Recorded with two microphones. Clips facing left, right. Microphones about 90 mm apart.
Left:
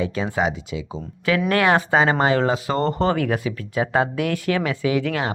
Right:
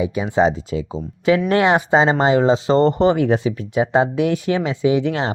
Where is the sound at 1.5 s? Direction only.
20° right (ahead or behind).